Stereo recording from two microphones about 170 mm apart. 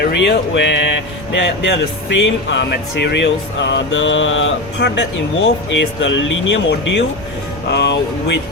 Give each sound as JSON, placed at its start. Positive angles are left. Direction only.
{"t": 0.0, "sound": "music", "side_deg": 90}
{"t": 1.3, "sound": "speech", "side_deg": 90}